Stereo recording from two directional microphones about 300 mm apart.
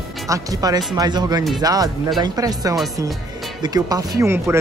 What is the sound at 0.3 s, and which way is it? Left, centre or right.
A man's voice, centre.